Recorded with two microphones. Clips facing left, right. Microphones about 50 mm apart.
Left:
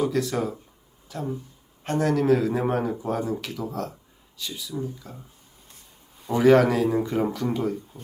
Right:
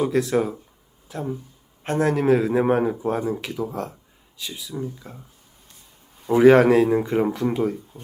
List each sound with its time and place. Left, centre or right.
0.0 s a man's voice: right
6.3 s speech: right
7.0 s a man's voice: right
7.3 s speech: centre